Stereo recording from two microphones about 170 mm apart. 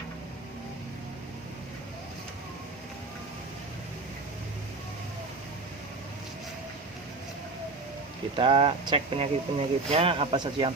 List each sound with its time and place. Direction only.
8.4 s speech: 30° right (ahead or behind)